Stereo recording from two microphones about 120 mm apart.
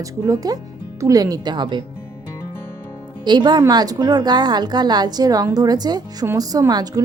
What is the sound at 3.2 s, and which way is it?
A woman's voice, 40° right (ahead or behind).